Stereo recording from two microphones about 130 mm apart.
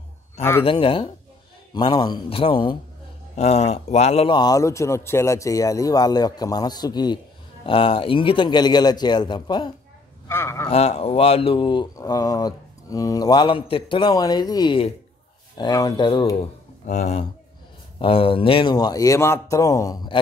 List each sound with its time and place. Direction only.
0.4 s a man's voice: 20° left (ahead or behind)
0.7 s speech: 40° left (ahead or behind)
3.3 s speech: 55° left (ahead or behind)
4.3 s a man's voice: 30° left (ahead or behind)
7.6 s speech: 45° left (ahead or behind)
10.2 s speech: 20° left (ahead or behind)
10.7 s speech: 50° left (ahead or behind); by 16.1 s 30° left (ahead or behind)
16.8 s speech: 65° left (ahead or behind)
17.9 s a man's voice: 45° left (ahead or behind); by 20.0 s 25° left (ahead or behind)